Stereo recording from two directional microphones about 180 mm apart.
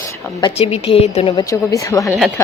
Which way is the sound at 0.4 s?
35° left (ahead or behind).